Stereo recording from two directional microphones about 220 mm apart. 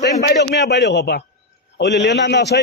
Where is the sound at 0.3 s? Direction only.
50° left (ahead or behind).